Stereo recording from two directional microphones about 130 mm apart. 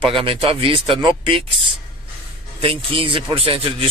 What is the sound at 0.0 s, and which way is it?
Speech, 45° right (ahead or behind).